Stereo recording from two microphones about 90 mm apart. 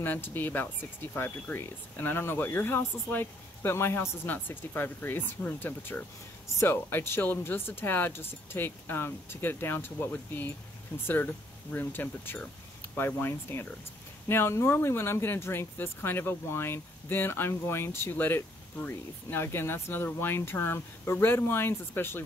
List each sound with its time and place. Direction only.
0.0 s speech: 25° left (ahead or behind)
11.7 s speech: 20° left (ahead or behind)